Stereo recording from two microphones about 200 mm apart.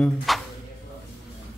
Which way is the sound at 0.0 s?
Centre (ahead or behind).